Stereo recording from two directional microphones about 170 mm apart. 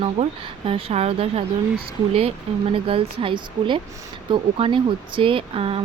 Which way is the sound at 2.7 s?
30° right (ahead or behind).